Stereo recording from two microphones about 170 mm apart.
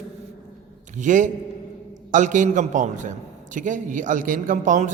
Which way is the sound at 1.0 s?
50° right (ahead or behind).